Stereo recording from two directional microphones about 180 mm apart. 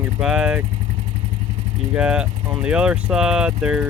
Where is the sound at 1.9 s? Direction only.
5° right (ahead or behind).